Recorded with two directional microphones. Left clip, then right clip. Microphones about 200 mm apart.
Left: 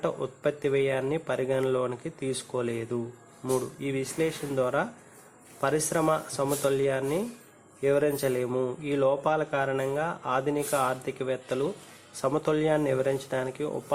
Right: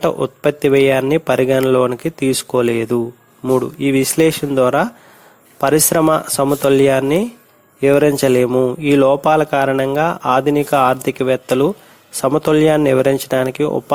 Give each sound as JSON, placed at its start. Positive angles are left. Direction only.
{"t": 0.0, "sound": "a man's voice", "side_deg": -45}